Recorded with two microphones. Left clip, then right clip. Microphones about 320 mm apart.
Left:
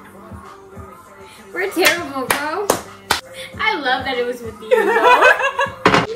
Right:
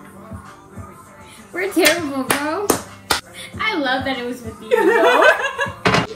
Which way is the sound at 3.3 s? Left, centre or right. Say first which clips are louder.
Left 2 dB; centre.